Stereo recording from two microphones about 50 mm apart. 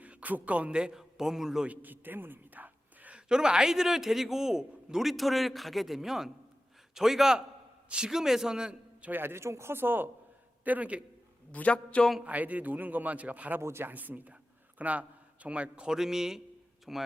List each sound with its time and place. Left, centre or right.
0.0 s a man's voice: right
0.9 s a man's voice: centre
1.6 s a sound: right
3.2 s a man's voice: centre
9.0 s a man's voice: right
9.2 s speech: right
10.6 s a man's voice: right
11.5 s a man's voice: left
12.2 s a man's voice: right
13.6 s speech: right
13.8 s a man's voice: right; by 16.0 s centre
16.0 s a man's voice: centre